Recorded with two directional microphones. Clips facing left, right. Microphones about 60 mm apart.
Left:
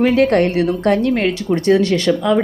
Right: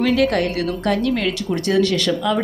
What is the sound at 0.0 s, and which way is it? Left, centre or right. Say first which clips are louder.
A woman's voice: left 4 dB; left.